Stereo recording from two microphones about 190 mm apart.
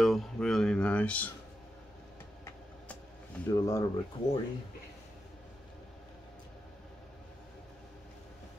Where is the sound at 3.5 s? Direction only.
15° left (ahead or behind).